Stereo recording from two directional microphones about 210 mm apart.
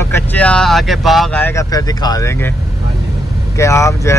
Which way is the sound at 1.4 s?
15° left (ahead or behind).